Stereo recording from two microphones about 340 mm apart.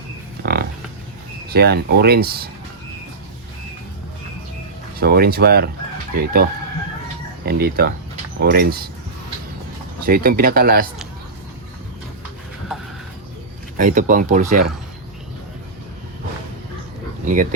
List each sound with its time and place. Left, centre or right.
0.4 s a sound: right
1.5 s speech: right
4.9 s speech: right
7.4 s speech: right
10.1 s speech: right
13.7 s speech: right
17.2 s speech: right